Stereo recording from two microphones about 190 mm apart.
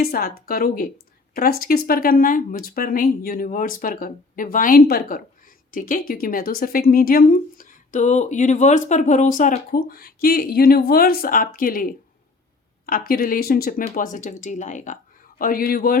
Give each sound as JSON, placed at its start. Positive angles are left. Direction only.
{"t": 0.0, "sound": "speech", "side_deg": 55}